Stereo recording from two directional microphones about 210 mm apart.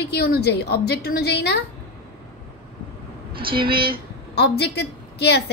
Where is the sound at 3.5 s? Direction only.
25° right (ahead or behind).